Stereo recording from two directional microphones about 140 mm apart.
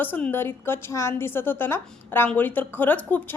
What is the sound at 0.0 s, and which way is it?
A woman's voice, 15° left (ahead or behind).